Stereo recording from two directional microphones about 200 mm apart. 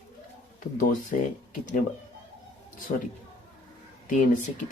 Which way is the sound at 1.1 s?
40° left (ahead or behind).